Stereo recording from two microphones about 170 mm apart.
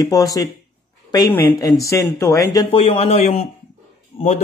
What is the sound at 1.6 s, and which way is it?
Speech, 20° left (ahead or behind).